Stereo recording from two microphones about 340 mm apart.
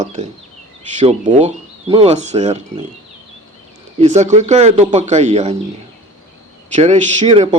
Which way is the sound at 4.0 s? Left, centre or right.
Centre.